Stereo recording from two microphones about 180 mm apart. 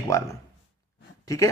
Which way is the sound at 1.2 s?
15° left (ahead or behind).